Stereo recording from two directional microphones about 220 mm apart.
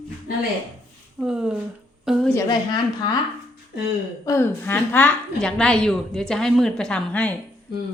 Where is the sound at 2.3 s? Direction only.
15° left (ahead or behind).